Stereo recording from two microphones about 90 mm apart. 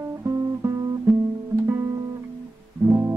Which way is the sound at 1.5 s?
30° right (ahead or behind).